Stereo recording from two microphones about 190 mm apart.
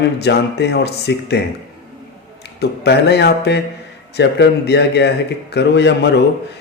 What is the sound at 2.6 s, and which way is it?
Speech, 60° left (ahead or behind).